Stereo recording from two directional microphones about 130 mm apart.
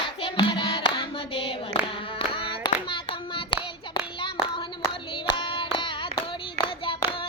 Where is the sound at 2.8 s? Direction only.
40° left (ahead or behind).